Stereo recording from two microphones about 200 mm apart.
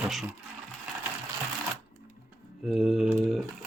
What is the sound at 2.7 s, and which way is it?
Speech, centre (ahead or behind).